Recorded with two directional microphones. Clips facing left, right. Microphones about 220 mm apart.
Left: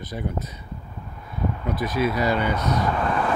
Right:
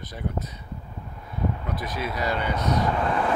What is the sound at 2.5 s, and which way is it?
Speech, 20° right (ahead or behind).